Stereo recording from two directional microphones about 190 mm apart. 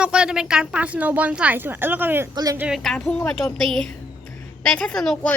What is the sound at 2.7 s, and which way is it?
A woman's voice, centre (ahead or behind).